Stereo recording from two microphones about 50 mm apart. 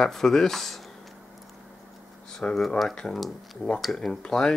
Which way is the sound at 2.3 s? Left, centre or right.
Centre.